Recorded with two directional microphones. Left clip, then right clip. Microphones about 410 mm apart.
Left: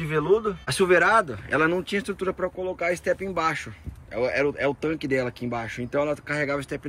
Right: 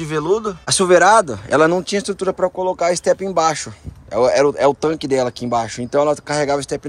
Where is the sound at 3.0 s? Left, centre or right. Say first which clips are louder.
Right 9 dB; right.